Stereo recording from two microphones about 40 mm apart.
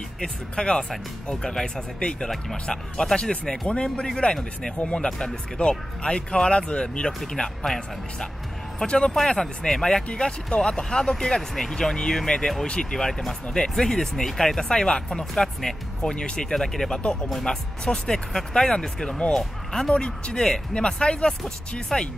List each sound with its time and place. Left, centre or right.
0.2 s speech: left
2.7 s speech: centre
7.3 s speech: centre
8.8 s speech: left
9.7 s speech: centre
16.5 s speech: centre